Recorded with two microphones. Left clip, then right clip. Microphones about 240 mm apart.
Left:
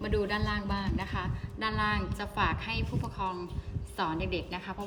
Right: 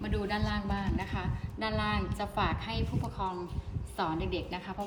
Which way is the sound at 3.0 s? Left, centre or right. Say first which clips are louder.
Left 1 dB; centre.